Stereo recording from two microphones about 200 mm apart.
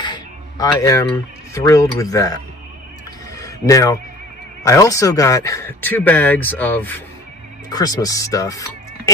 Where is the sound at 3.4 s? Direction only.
15° left (ahead or behind).